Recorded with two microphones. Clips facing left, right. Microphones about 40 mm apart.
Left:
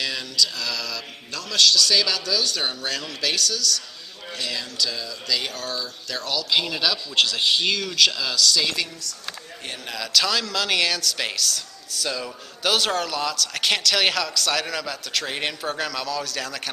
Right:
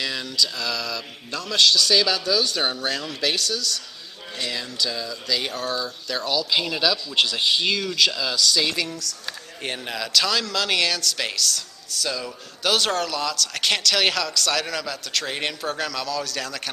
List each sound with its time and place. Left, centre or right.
0.0 s mantra: centre
0.5 s mantra: centre
1.4 s speech: centre
3.1 s mantra: centre
4.5 s speech: centre
6.5 s speech: centre